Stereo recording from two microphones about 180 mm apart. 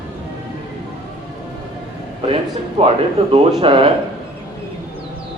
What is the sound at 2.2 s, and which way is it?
Speech, 30° right (ahead or behind).